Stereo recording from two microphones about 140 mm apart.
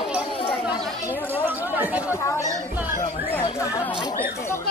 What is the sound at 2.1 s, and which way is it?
Speech, 20° left (ahead or behind).